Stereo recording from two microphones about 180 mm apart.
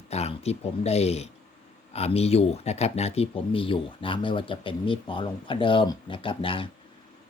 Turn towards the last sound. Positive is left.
turn(degrees=30)  # may be behind; listen again after turning